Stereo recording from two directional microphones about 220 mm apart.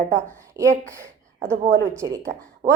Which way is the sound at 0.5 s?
15° right (ahead or behind).